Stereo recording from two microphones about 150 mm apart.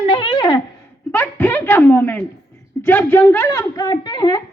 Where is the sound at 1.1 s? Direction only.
10° left (ahead or behind).